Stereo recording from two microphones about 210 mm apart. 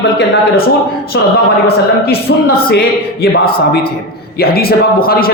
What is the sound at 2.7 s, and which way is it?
Speech, 45° left (ahead or behind).